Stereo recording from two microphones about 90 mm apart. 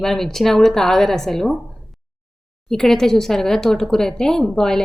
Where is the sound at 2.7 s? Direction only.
5° left (ahead or behind).